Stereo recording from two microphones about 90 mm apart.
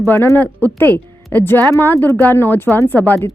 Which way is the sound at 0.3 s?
20° left (ahead or behind).